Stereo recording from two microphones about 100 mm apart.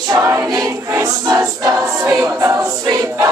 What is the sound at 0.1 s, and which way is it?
Choir, 30° right (ahead or behind).